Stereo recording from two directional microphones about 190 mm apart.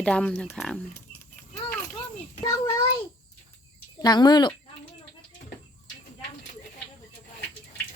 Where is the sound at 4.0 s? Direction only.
20° left (ahead or behind).